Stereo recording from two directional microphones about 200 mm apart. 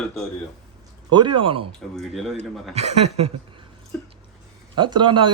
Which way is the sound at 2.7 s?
30° right (ahead or behind).